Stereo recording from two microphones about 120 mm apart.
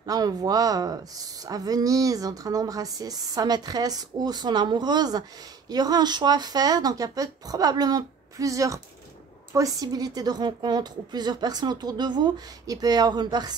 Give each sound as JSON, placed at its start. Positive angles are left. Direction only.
{"t": 0.0, "sound": "speech", "side_deg": -30}